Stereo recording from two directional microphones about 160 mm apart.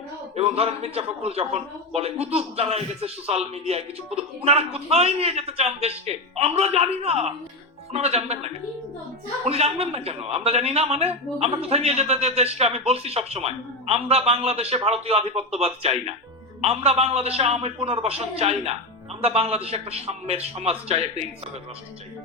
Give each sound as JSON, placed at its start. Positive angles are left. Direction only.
{"t": 0.3, "sound": "speech", "side_deg": -40}